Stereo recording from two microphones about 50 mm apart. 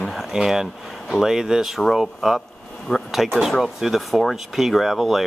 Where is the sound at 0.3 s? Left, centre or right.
Centre.